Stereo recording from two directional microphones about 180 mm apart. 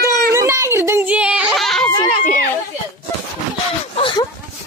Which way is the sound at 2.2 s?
50° left (ahead or behind).